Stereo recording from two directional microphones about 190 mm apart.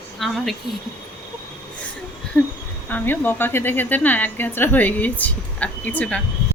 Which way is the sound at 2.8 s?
10° left (ahead or behind).